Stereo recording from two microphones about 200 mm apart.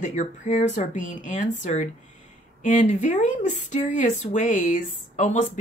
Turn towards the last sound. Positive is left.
turn(degrees=35)  # may be behind; listen again after turning